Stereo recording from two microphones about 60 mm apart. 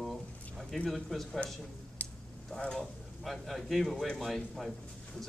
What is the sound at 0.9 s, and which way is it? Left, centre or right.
Speech, centre.